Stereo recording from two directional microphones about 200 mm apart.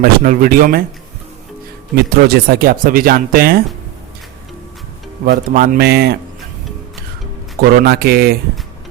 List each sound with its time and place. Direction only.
0.0 s speech: 45° right (ahead or behind)
2.0 s speech: 50° right (ahead or behind)
5.2 s speech: 45° right (ahead or behind)
7.8 s speech: 50° right (ahead or behind)